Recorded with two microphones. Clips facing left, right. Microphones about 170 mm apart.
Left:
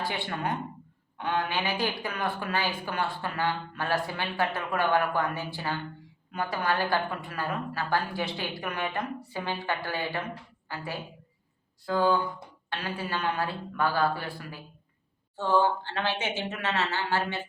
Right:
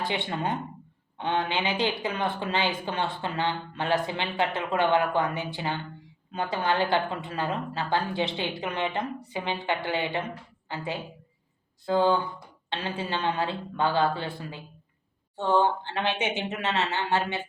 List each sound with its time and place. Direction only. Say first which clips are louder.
0.0 s speech: right 2 dB; 20° right (ahead or behind)
11.9 s speech: right 2 dB; 25° right (ahead or behind)